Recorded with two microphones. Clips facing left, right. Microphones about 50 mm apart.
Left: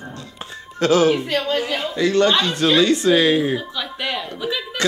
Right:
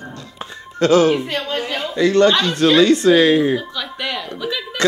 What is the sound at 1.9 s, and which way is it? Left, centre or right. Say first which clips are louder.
Speech: right 4 dB; right.